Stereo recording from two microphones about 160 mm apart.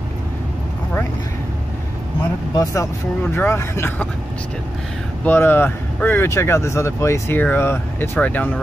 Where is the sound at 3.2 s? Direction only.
15° left (ahead or behind).